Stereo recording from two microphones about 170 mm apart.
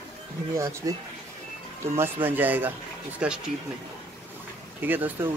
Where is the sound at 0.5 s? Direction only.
20° right (ahead or behind).